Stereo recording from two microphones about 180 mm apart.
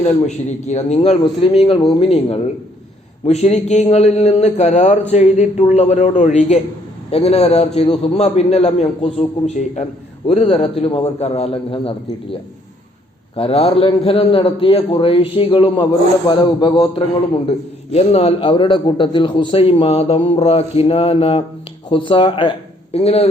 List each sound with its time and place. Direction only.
0.0 s a man's voice: 40° left (ahead or behind)